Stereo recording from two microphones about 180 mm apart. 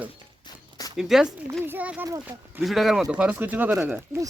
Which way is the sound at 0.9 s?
Centre (ahead or behind).